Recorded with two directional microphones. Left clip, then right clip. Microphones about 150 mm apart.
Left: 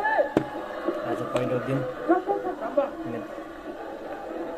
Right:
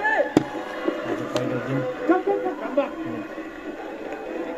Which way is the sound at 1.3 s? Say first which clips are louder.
Even; 40° right (ahead or behind).